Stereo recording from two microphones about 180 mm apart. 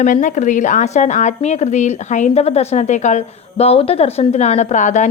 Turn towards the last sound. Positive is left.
turn(degrees=40)  # may be behind; listen again after turning